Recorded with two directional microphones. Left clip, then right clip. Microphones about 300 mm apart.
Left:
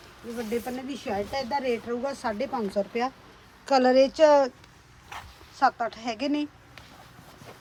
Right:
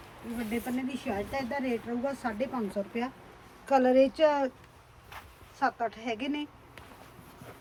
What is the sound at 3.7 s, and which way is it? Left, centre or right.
Speech, left.